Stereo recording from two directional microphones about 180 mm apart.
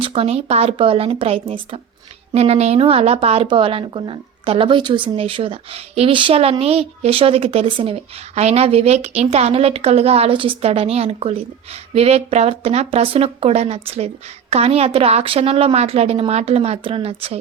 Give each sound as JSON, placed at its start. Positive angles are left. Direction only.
{"t": 0.0, "sound": "a woman's voice", "side_deg": -35}